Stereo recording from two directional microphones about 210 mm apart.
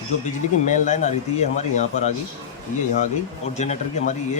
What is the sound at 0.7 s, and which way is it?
Speech, 35° left (ahead or behind).